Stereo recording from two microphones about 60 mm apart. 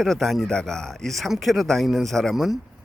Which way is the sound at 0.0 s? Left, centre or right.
Centre.